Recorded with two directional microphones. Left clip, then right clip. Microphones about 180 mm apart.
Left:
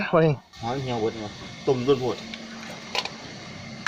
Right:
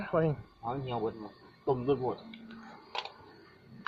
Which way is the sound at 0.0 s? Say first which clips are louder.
Left 10 dB; 25° left (ahead or behind).